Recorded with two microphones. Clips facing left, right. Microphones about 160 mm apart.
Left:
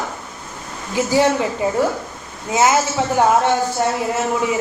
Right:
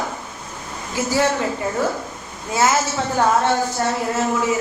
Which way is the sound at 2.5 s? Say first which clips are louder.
Left 3 dB; 20° left (ahead or behind).